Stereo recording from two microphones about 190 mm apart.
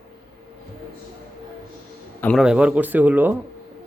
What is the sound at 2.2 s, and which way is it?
Speech, 5° left (ahead or behind).